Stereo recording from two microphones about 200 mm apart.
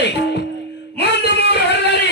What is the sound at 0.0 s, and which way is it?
Music, 60° left (ahead or behind).